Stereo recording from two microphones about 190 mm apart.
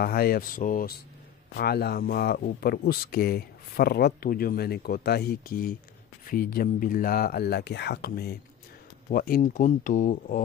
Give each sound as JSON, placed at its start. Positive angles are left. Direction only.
{"t": 0.0, "sound": "speech", "side_deg": 55}
{"t": 1.6, "sound": "speech", "side_deg": 55}